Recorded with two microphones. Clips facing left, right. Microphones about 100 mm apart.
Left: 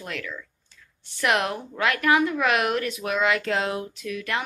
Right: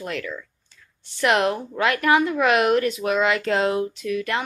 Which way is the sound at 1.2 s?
Centre (ahead or behind).